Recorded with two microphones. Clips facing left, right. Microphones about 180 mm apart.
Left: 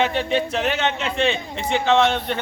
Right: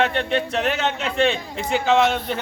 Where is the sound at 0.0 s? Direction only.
Centre (ahead or behind).